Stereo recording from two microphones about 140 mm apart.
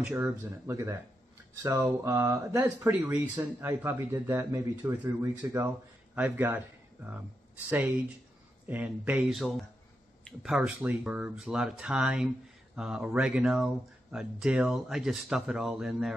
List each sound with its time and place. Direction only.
0.1 s speech: 20° right (ahead or behind)
2.9 s speech: 10° right (ahead or behind)
6.1 s speech: 15° right (ahead or behind)
8.6 s speech: 10° right (ahead or behind)